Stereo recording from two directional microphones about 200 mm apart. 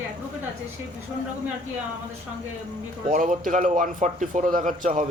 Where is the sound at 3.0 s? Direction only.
40° right (ahead or behind).